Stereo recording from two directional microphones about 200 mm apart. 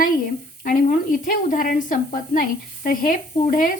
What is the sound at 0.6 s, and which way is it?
A woman's voice, 40° left (ahead or behind).